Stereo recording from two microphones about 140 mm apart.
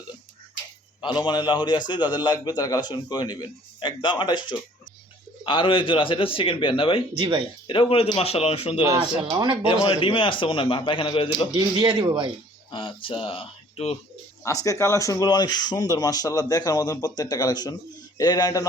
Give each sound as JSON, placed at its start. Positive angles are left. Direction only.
{"t": 1.0, "sound": "a man's voice", "side_deg": 30}
{"t": 7.2, "sound": "speech", "side_deg": -40}
{"t": 7.7, "sound": "speech", "side_deg": 40}
{"t": 9.3, "sound": "speech", "side_deg": -35}
{"t": 9.9, "sound": "a man's voice", "side_deg": 40}
{"t": 11.5, "sound": "speech", "side_deg": -35}
{"t": 12.7, "sound": "a man's voice", "side_deg": 40}
{"t": 14.4, "sound": "speech", "side_deg": 25}